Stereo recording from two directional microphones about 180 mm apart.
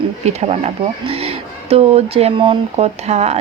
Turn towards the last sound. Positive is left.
turn(degrees=-35)  # may be behind; listen again after turning